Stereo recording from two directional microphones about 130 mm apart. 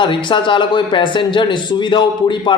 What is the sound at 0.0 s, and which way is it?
A man's voice, 40° left (ahead or behind).